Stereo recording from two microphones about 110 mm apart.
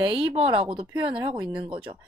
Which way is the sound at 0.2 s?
60° right (ahead or behind).